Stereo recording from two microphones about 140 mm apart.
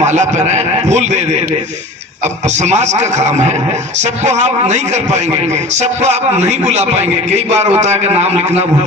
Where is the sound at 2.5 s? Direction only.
55° right (ahead or behind).